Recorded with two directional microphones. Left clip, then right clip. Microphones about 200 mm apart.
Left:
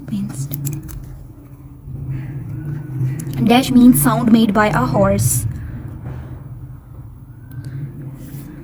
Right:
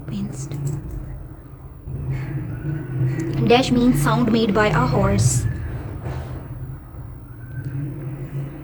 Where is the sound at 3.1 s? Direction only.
45° left (ahead or behind).